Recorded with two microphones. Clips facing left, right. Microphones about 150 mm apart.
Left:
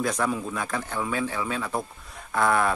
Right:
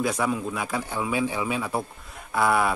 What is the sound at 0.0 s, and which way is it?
Speech, 5° right (ahead or behind).